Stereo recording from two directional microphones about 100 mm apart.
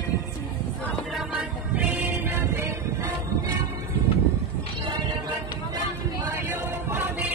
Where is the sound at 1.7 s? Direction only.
15° right (ahead or behind).